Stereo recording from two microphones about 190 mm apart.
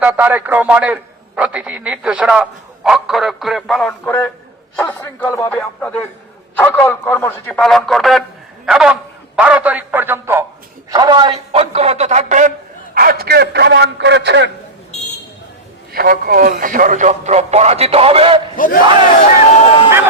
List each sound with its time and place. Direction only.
0.0 s a man's voice: 10° right (ahead or behind)
10.9 s a man's voice: 25° right (ahead or behind); by 14.5 s 65° right (ahead or behind)
15.9 s a man's voice: 50° right (ahead or behind); by 18.3 s 30° right (ahead or behind)
18.5 s battle cry: 45° left (ahead or behind)